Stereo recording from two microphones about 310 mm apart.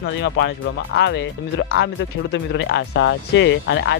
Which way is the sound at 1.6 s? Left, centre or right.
Left.